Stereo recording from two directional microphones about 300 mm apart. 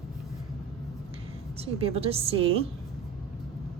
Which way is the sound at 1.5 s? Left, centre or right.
Centre.